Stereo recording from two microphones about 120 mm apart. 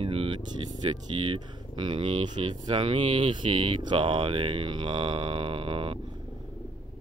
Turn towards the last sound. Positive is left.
turn(degrees=-50)  # may be behind; listen again after turning